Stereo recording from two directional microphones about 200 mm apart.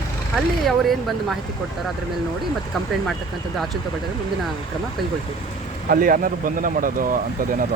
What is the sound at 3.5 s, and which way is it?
Speech, centre (ahead or behind).